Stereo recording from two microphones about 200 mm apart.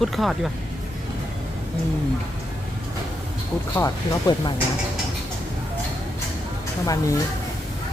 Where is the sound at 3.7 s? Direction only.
15° left (ahead or behind).